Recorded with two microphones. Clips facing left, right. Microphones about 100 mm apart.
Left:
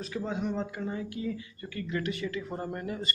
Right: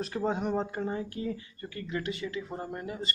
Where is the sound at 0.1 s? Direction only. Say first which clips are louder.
Right 2 dB; 40° right (ahead or behind); by 3.0 s 10° right (ahead or behind).